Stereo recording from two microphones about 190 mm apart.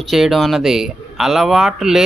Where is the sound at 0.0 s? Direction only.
Centre (ahead or behind).